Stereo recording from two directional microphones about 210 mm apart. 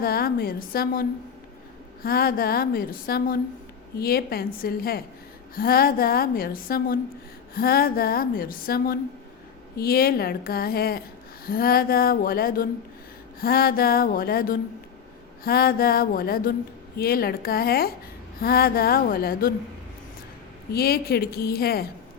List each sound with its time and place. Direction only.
0.0 s a woman's voice: 45° left (ahead or behind)
20.7 s a woman's voice: 45° left (ahead or behind)